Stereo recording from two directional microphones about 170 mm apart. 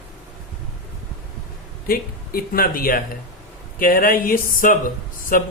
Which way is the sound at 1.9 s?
60° left (ahead or behind).